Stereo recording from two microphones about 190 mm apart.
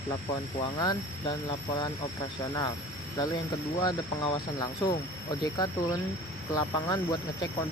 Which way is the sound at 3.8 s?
20° left (ahead or behind).